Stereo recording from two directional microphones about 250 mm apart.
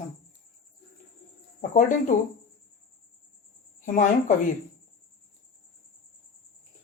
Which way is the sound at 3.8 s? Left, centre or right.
Left.